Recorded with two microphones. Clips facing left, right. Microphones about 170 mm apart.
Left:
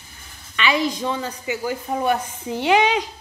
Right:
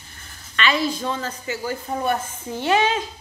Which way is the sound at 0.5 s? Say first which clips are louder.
Left 1 dB; 15° left (ahead or behind).